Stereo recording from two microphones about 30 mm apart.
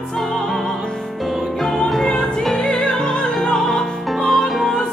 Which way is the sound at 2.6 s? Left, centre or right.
Left.